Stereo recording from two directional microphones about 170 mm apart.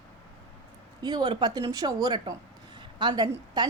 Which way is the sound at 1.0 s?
25° right (ahead or behind).